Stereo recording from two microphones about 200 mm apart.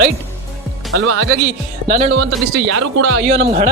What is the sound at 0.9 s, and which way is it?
Speech, 90° right.